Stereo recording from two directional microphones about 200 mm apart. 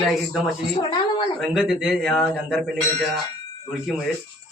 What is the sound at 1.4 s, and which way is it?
Speech, 5° right (ahead or behind).